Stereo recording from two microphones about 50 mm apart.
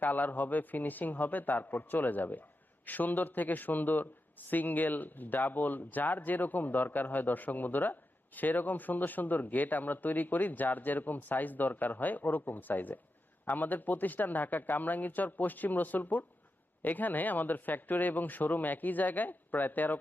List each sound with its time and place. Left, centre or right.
0.0 s a man's voice: left